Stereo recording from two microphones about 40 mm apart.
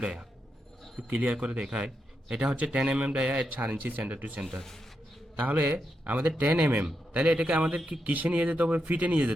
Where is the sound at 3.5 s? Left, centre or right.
Right.